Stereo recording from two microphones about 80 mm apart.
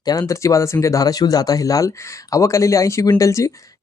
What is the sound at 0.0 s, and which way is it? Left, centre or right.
Speech, left.